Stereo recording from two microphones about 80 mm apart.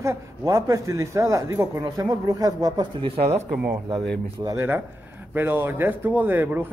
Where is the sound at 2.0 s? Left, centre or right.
Right.